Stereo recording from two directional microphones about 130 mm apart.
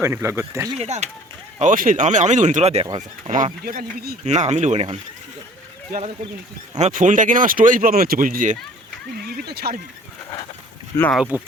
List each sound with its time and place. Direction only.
0.0 s speech: 20° right (ahead or behind)
0.8 s speech: 60° right (ahead or behind)
1.5 s speech: 80° right; by 2.8 s 55° right (ahead or behind)
3.2 s speech: 70° right (ahead or behind)
6.7 s speech: 65° right (ahead or behind); by 8.5 s 90° right
10.9 s speech: 20° left (ahead or behind)
11.3 s speech: 15° right (ahead or behind)